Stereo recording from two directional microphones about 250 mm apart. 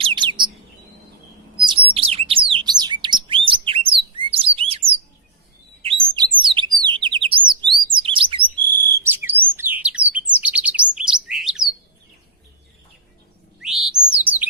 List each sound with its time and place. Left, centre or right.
0.0 s bird: centre
1.6 s bird: centre
3.7 s chirp: right
5.8 s chirp: right
8.6 s bird: centre
10.1 s chirp: centre
13.6 s bird: centre